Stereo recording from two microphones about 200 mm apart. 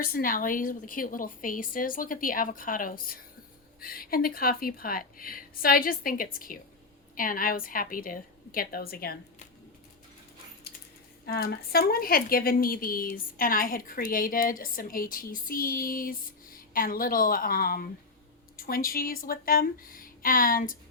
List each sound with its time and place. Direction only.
0.0 s speech: 45° left (ahead or behind)
11.3 s speech: 50° left (ahead or behind)